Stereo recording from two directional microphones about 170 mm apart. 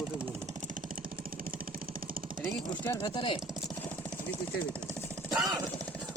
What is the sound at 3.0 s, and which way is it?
Speech, 30° left (ahead or behind).